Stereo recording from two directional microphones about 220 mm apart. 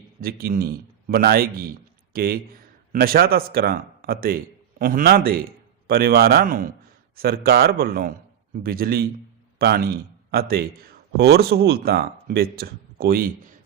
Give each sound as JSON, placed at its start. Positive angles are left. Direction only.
{"t": 0.2, "sound": "speech", "side_deg": -45}